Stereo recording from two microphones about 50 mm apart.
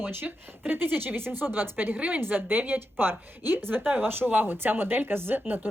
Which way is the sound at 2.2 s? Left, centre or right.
Right.